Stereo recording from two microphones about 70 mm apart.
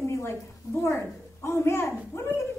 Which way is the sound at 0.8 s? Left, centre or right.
Left.